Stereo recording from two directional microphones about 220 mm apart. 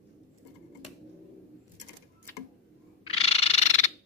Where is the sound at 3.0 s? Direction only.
25° left (ahead or behind).